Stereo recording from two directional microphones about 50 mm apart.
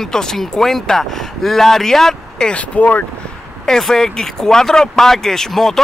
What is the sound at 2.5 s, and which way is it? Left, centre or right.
Speech, left.